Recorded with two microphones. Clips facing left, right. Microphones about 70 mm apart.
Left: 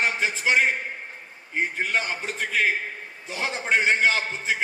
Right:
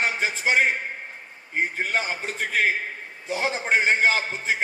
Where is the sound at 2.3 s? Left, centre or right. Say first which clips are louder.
Right 1 dB; right.